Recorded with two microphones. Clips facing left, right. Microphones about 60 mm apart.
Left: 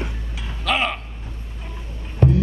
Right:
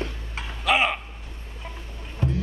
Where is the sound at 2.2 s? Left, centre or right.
Left.